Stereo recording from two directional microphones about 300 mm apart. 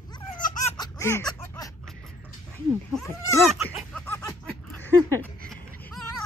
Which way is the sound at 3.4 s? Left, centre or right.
Centre.